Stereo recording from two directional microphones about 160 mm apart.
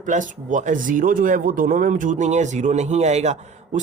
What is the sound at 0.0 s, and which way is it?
Speech, 50° right (ahead or behind).